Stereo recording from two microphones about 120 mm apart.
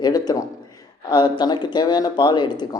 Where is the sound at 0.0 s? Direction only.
35° left (ahead or behind).